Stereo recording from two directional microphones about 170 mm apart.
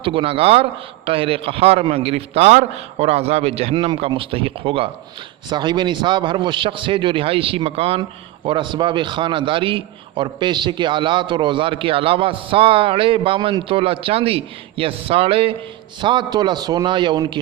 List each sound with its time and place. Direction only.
0.0 s a man's voice: 30° right (ahead or behind)